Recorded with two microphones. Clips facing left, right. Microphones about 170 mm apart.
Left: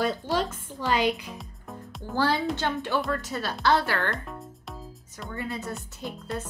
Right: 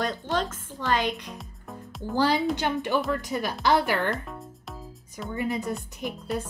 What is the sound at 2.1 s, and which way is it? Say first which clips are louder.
Speech: right 2 dB; 15° right (ahead or behind).